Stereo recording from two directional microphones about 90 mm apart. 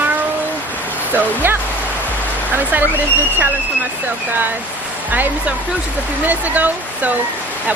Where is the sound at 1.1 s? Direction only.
25° right (ahead or behind).